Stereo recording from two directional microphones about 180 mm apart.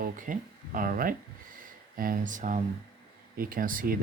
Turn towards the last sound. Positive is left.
turn(degrees=-50)  # may be behind; listen again after turning